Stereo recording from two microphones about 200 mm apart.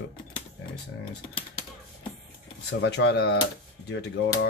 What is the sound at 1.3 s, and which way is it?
Typing, 25° left (ahead or behind).